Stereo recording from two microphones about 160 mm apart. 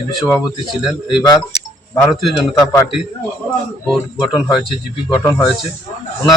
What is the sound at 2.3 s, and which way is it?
Speech, 20° left (ahead or behind).